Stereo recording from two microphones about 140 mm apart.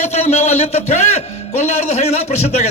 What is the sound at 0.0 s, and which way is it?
A man's voice, 50° left (ahead or behind).